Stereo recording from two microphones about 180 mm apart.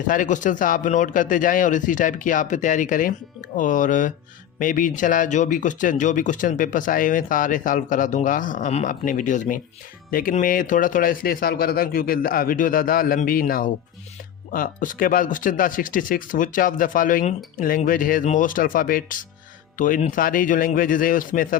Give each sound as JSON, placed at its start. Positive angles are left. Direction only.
{"t": 0.1, "sound": "speech", "side_deg": 45}